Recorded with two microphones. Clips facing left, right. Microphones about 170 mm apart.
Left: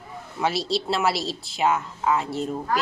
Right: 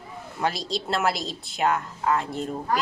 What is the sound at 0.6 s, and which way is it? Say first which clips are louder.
Speech: left 2 dB; 45° right (ahead or behind).